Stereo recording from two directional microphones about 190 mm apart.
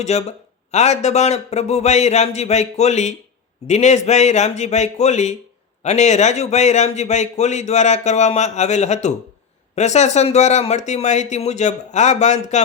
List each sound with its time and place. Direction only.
0.0 s a man's voice: 35° left (ahead or behind)